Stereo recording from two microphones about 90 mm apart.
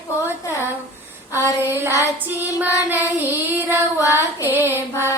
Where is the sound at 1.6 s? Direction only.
25° right (ahead or behind).